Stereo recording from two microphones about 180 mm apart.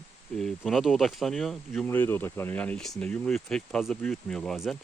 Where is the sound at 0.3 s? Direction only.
Centre (ahead or behind).